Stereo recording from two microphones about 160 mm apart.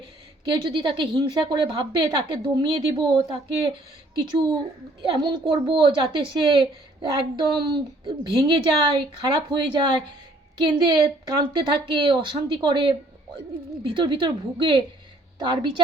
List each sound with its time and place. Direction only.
0.4 s a woman's voice: 30° right (ahead or behind)